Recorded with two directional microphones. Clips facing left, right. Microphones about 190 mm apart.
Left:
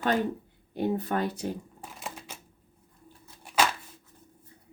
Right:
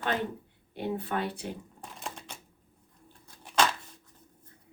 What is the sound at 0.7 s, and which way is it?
Speech, 40° left (ahead or behind).